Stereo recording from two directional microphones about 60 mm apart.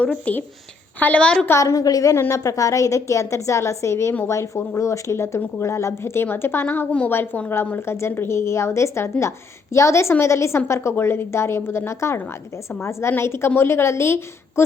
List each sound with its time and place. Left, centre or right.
0.0 s a woman's voice: left
1.5 s a woman's voice: left
2.3 s a woman's voice: left